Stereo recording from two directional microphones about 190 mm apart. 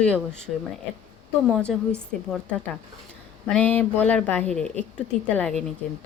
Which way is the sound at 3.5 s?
5° left (ahead or behind).